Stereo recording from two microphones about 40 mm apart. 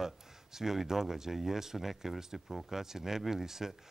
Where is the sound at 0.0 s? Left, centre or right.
Centre.